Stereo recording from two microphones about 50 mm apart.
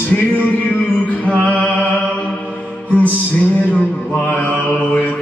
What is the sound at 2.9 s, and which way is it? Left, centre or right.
Mantra, left.